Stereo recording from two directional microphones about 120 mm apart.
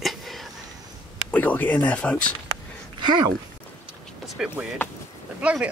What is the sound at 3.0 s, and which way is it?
Speech, 35° right (ahead or behind).